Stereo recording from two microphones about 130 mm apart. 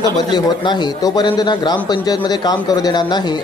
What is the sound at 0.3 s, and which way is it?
A man's voice, 35° left (ahead or behind).